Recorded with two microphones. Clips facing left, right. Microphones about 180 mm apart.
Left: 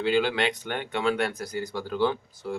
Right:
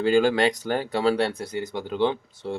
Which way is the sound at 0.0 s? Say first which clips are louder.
Right 5 dB; 45° right (ahead or behind).